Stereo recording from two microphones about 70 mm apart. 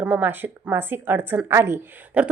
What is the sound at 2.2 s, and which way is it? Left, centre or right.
Speech, centre.